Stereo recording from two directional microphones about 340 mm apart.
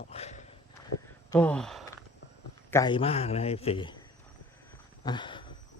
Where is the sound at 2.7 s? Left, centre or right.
Centre.